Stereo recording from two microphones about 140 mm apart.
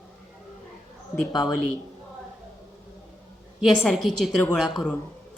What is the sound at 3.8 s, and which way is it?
Speech, centre (ahead or behind).